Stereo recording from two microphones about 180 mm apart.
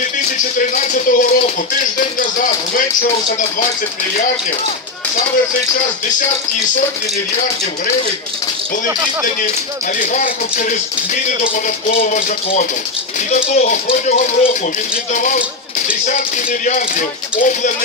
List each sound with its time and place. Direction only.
0.6 s speech: 45° left (ahead or behind)
9.9 s speech: 45° left (ahead or behind)
13.3 s speech: 45° left (ahead or behind)
14.0 s speech: 30° left (ahead or behind)
15.1 s speech: 45° left (ahead or behind)
17.4 s speech: 45° left (ahead or behind)